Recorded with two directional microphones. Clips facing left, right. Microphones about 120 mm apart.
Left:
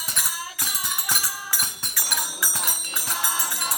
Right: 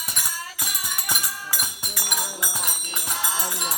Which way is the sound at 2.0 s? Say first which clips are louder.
Right 1 dB; 20° right (ahead or behind).